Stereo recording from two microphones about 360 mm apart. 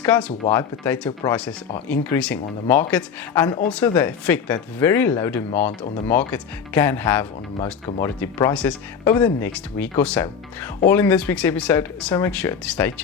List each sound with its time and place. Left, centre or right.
0.0 s speech: centre
7.6 s speech: centre
8.2 s speech: centre